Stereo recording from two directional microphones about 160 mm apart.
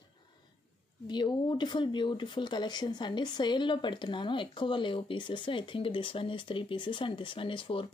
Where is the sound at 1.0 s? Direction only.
30° left (ahead or behind).